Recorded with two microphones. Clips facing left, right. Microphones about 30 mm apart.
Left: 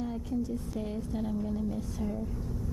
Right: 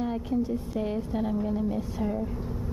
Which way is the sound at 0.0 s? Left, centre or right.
Right.